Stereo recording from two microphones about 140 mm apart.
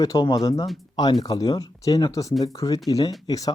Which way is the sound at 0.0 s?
25° left (ahead or behind).